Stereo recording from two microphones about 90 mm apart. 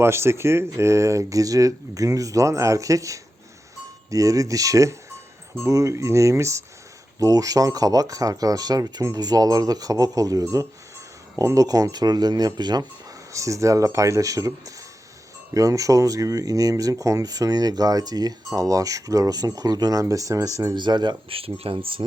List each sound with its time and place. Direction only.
0.0 s speech: 30° right (ahead or behind); by 12.8 s 50° right (ahead or behind)
13.3 s speech: 35° right (ahead or behind)
20.7 s speech: 55° right (ahead or behind)
21.2 s speech: 90° right